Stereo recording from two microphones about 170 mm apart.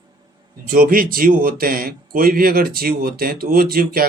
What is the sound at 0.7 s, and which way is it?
A man's voice, 60° right (ahead or behind).